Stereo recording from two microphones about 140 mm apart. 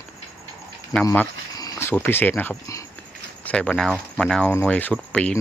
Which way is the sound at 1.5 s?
25° left (ahead or behind).